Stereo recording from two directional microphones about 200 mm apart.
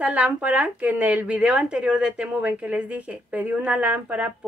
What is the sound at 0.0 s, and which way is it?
A woman's voice, 5° right (ahead or behind).